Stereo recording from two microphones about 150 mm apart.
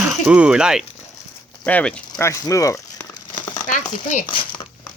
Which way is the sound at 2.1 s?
20° left (ahead or behind).